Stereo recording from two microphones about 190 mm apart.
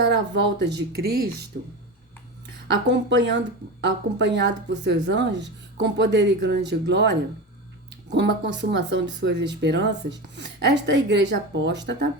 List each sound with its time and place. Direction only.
0.0 s speech: 70° right (ahead or behind)
2.8 s speech: 70° right (ahead or behind)